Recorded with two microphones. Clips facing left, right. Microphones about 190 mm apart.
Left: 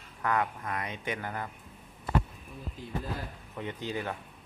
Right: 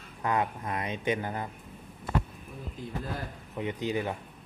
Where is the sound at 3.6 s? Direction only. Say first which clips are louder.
Right 5 dB; 15° right (ahead or behind).